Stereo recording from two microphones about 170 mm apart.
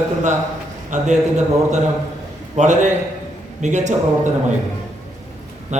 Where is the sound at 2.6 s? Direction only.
45° right (ahead or behind).